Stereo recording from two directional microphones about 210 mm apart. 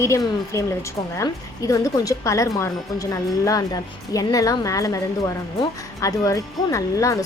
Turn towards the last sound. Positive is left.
turn(degrees=15)  # may be behind; listen again after turning